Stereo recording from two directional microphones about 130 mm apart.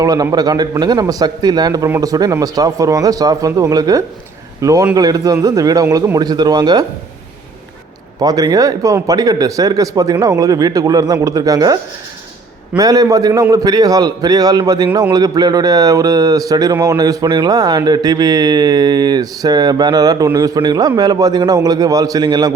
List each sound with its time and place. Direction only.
0.0 s speech: 30° right (ahead or behind)
8.2 s speech: 30° right (ahead or behind)